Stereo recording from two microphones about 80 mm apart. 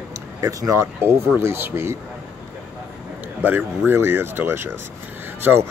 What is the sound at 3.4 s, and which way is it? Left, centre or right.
Speech, right.